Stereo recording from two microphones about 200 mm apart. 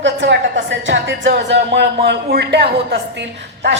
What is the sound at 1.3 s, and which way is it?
A man's voice, 60° right (ahead or behind).